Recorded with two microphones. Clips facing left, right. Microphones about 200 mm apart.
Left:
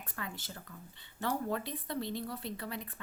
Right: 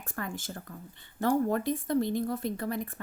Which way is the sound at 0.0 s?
45° right (ahead or behind).